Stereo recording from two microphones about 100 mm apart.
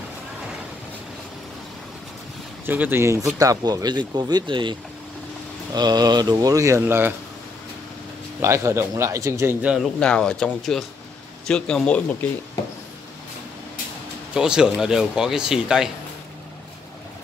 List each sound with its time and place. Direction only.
2.6 s a man's voice: 20° right (ahead or behind); by 4.7 s 55° right (ahead or behind)
5.7 s speech: 45° right (ahead or behind); by 7.2 s 20° right (ahead or behind)
8.4 s a man's voice: 30° right (ahead or behind)
9.9 s speech: 10° left (ahead or behind)
14.3 s speech: 10° right (ahead or behind)